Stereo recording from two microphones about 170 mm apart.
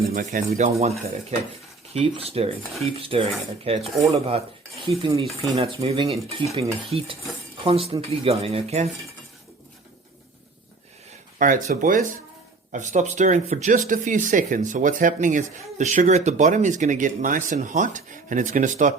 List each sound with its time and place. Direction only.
0.0 s speech: 50° right (ahead or behind)
1.9 s cutlery: 35° right (ahead or behind)
11.3 s speech: 50° right (ahead or behind)